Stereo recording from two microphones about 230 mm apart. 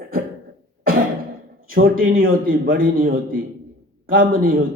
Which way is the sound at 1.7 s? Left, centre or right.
Right.